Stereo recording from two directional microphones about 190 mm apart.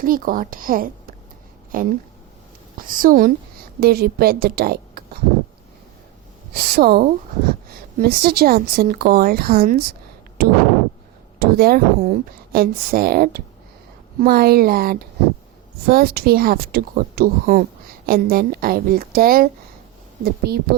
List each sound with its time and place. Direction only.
0.0 s a woman's voice: 45° right (ahead or behind)
6.5 s a woman's voice: 55° right (ahead or behind)
11.3 s a woman's voice: 55° right (ahead or behind)